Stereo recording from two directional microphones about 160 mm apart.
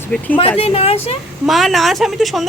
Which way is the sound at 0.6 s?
40° left (ahead or behind).